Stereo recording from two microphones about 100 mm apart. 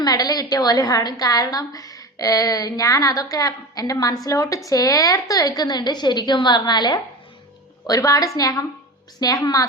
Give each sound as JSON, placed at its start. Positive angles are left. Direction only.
{"t": 0.0, "sound": "a woman's voice", "side_deg": 40}